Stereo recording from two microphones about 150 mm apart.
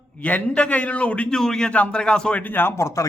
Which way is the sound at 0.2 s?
10° left (ahead or behind).